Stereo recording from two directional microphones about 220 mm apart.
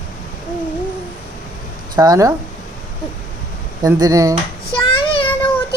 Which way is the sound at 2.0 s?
15° right (ahead or behind).